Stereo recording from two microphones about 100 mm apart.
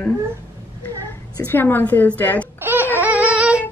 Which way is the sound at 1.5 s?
20° left (ahead or behind).